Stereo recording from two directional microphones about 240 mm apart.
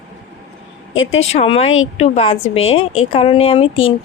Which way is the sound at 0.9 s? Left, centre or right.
Left.